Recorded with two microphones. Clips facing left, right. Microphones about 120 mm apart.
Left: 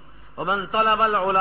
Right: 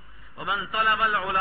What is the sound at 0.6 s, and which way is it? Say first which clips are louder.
Speech: left 4 dB; 45° left (ahead or behind).